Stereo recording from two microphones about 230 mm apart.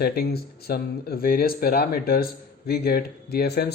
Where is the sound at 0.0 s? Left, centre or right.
Left.